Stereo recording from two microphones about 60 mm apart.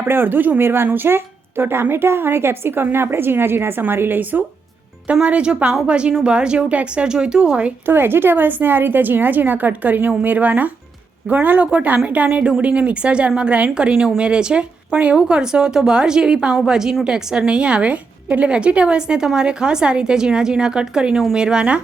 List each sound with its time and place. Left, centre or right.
0.0 s speech: right
5.2 s a woman's voice: centre
7.9 s a woman's voice: right; by 21.8 s centre